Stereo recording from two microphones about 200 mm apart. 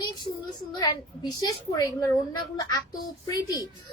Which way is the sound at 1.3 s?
20° left (ahead or behind).